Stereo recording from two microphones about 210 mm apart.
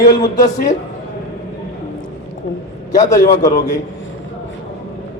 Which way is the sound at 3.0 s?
15° left (ahead or behind).